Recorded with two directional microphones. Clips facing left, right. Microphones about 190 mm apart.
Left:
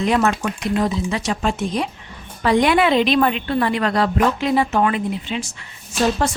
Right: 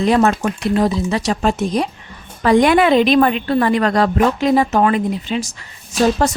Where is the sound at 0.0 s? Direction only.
35° right (ahead or behind).